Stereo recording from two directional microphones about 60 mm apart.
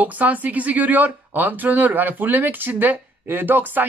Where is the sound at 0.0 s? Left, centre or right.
Right.